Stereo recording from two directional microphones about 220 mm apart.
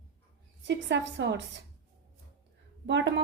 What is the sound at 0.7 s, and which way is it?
Speech, 55° right (ahead or behind).